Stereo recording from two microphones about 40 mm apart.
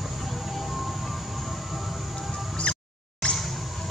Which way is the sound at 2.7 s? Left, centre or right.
Left.